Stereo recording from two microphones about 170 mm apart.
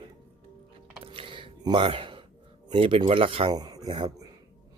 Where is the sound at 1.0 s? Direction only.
30° right (ahead or behind).